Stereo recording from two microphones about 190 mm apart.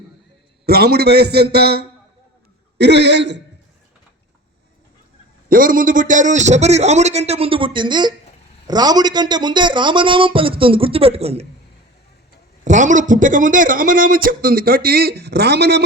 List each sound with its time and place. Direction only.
0.6 s a man's voice: 55° right (ahead or behind)
2.7 s a sound: 65° right (ahead or behind)
5.5 s a man's voice: 45° right (ahead or behind); by 11.4 s 30° right (ahead or behind)
12.6 s speech: 40° right (ahead or behind); by 15.8 s 55° right (ahead or behind)